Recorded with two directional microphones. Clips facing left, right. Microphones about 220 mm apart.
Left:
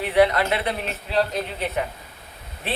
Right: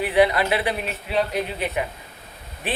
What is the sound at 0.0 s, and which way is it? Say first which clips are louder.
Speech: even; 15° right (ahead or behind).